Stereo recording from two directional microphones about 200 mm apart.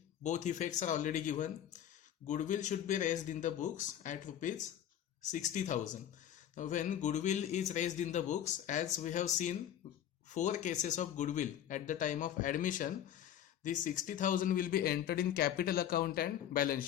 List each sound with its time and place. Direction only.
0.2 s speech: 35° left (ahead or behind)